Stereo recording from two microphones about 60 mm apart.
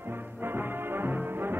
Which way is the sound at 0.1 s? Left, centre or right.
Right.